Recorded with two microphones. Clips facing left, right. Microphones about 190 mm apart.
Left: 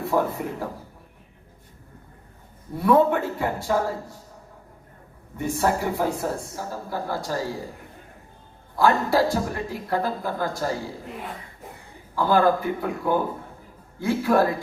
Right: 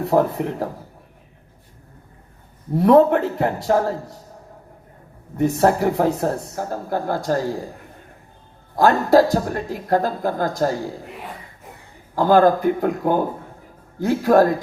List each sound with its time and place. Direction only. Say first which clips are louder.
0.0 s speech: right 5 dB; 40° right (ahead or behind)
2.7 s speech: right 5 dB; 40° right (ahead or behind)
5.4 s speech: right 7 dB; 40° right (ahead or behind)
8.7 s speech: right 6 dB; 45° right (ahead or behind)
12.1 s speech: right 5 dB; 45° right (ahead or behind)